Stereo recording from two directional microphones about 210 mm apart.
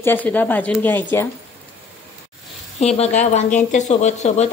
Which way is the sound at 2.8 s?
30° left (ahead or behind).